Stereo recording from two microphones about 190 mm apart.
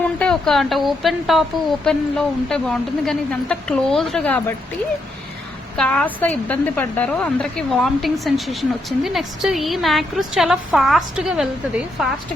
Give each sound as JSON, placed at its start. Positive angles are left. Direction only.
{"t": 0.2, "sound": "a woman's voice", "side_deg": 5}
{"t": 5.7, "sound": "a woman's voice", "side_deg": 5}